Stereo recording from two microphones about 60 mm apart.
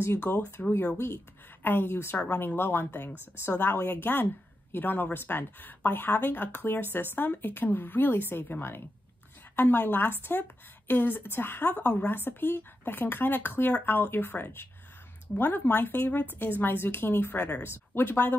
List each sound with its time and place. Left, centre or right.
0.0 s a woman's voice: left